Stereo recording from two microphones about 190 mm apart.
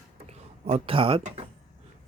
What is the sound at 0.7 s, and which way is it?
Speech, 30° right (ahead or behind).